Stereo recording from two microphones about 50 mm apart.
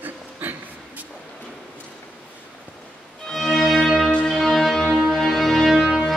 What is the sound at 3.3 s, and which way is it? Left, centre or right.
Violin, centre.